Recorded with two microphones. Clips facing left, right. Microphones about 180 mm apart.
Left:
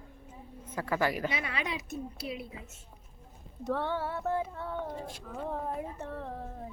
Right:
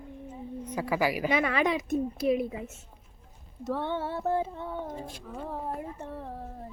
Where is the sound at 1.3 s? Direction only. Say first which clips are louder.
Right 10 dB; 50° right (ahead or behind).